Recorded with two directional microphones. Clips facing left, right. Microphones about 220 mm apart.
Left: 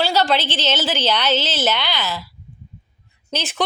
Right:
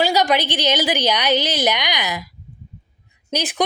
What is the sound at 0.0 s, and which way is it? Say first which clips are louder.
A woman's voice: right 1 dB; 15° right (ahead or behind).